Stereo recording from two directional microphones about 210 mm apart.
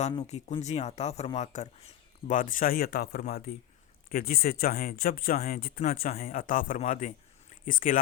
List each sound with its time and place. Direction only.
0.3 s speech: 30° left (ahead or behind)